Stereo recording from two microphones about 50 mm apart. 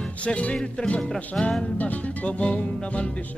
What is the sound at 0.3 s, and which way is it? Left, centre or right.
Music, left.